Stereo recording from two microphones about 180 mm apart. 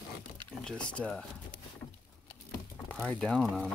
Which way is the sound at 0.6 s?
5° left (ahead or behind).